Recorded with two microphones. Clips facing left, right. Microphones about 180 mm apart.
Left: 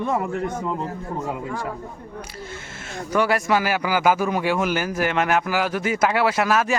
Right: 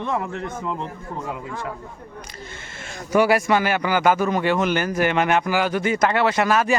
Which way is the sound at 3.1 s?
10° right (ahead or behind).